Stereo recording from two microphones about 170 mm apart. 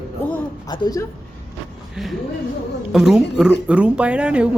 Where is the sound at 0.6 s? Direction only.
25° left (ahead or behind).